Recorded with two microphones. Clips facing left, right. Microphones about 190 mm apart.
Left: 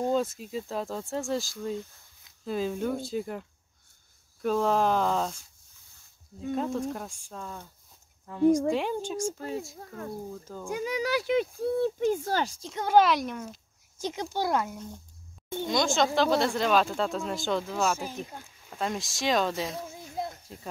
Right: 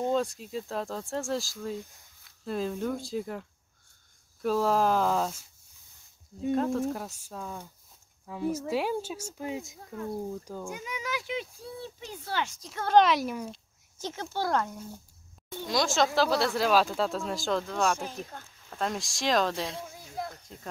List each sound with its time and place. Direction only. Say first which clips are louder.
0.1 s speech: left 1 dB; centre (ahead or behind)
6.5 s speech: right 2 dB; centre (ahead or behind); by 9.8 s 15° right (ahead or behind)
10.7 s speech: left 11 dB; 35° left (ahead or behind)
11.1 s speech: left 9 dB; 60° left (ahead or behind); by 12.5 s 40° left (ahead or behind)
12.5 s speech: left 3 dB; 30° left (ahead or behind)
12.8 s speech: even; 5° left (ahead or behind)
13.9 s speech: left 3 dB; 15° left (ahead or behind)
19.9 s a sound: left 2 dB; 20° left (ahead or behind)